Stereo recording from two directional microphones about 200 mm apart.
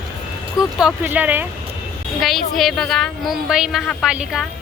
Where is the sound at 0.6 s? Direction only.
5° right (ahead or behind).